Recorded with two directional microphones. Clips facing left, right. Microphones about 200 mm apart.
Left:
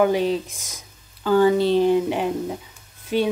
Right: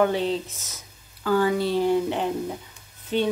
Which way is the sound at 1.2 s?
25° left (ahead or behind).